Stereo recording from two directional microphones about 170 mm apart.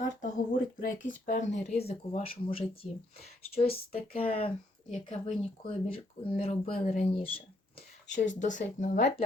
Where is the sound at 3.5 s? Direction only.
35° left (ahead or behind).